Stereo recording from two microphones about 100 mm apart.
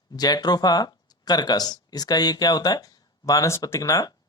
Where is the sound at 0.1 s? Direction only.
40° left (ahead or behind).